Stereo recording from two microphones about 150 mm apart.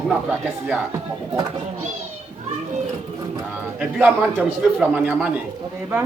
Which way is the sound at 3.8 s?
10° right (ahead or behind).